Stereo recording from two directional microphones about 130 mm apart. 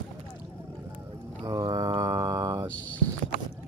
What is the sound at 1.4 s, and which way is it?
Mantra, 30° right (ahead or behind).